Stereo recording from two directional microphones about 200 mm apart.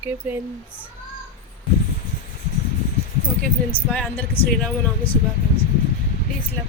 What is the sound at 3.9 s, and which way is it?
Speech, 5° left (ahead or behind).